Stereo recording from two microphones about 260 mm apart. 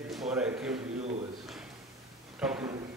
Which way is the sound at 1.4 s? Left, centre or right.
Centre.